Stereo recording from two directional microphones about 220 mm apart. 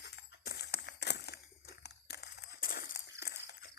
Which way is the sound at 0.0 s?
50° left (ahead or behind).